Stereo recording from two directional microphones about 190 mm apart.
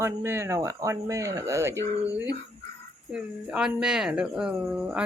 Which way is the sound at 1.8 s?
15° left (ahead or behind).